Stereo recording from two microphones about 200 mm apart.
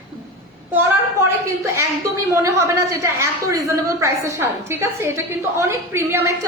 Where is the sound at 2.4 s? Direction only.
15° right (ahead or behind).